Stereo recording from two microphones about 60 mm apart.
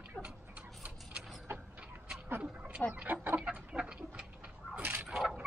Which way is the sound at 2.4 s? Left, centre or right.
Centre.